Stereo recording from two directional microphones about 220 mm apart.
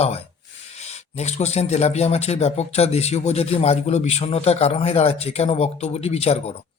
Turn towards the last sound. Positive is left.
turn(degrees=30)  # may be behind; listen again after turning